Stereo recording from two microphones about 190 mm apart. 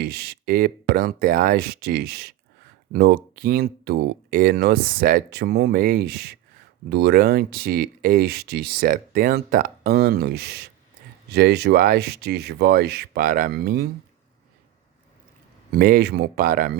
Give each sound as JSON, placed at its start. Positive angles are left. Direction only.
{"t": 0.0, "sound": "speech", "side_deg": -55}
{"t": 15.7, "sound": "speech", "side_deg": -55}